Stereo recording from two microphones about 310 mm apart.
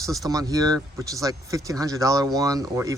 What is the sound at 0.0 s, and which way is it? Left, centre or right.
Speech, centre.